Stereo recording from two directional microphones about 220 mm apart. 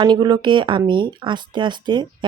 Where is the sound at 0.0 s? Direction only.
20° right (ahead or behind).